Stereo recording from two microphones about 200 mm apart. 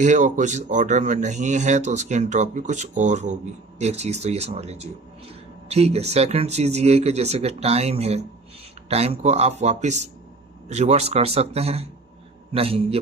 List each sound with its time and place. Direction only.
0.0 s a man's voice: 40° right (ahead or behind)